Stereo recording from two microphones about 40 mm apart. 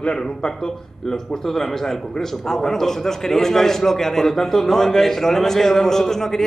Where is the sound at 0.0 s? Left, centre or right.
Left.